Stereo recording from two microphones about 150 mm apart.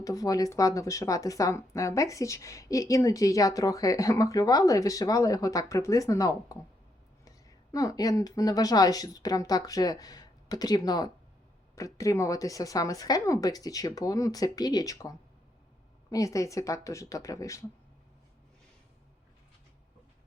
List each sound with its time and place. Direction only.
0.0 s a woman's voice: 25° left (ahead or behind)